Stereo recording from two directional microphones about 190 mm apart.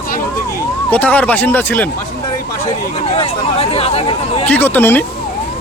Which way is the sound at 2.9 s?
30° left (ahead or behind).